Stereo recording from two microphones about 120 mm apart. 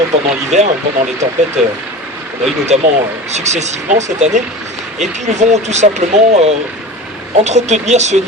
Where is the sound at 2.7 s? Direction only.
70° right (ahead or behind).